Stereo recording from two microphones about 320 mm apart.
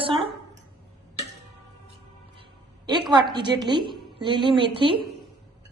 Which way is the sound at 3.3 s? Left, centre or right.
Centre.